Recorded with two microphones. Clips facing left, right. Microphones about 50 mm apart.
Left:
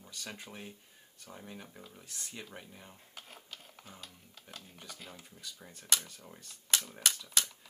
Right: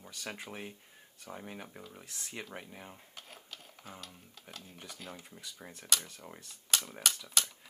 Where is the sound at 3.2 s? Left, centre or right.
Centre.